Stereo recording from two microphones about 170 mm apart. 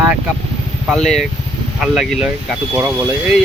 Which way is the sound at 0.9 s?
Centre (ahead or behind).